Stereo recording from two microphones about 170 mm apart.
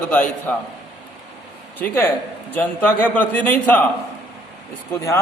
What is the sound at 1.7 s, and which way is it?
A man's voice, 10° left (ahead or behind).